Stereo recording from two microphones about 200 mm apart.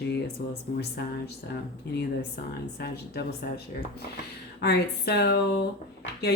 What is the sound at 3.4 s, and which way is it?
Speech, 50° left (ahead or behind).